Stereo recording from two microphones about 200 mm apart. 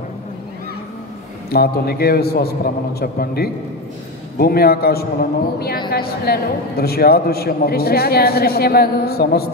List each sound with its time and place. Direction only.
1.5 s a man's voice: 50° left (ahead or behind)